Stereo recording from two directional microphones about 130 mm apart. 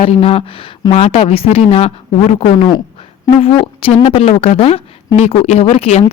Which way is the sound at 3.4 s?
45° left (ahead or behind).